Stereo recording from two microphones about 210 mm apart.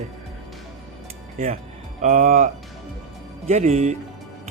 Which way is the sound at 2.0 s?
35° right (ahead or behind).